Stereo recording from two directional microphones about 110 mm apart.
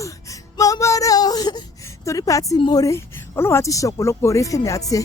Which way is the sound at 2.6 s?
35° left (ahead or behind).